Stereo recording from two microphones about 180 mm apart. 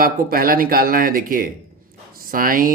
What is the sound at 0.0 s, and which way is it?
Speech, 55° right (ahead or behind).